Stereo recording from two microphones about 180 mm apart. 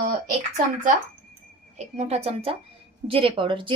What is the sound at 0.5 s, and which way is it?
Speech, 45° right (ahead or behind).